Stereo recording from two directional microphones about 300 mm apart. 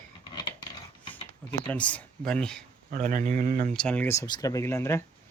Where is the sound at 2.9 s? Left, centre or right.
Right.